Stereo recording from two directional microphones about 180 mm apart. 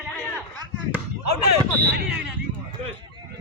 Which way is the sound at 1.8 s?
65° right (ahead or behind).